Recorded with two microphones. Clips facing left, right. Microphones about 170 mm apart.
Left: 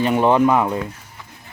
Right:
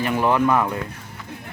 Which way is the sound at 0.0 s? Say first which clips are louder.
Left 4 dB; 25° left (ahead or behind).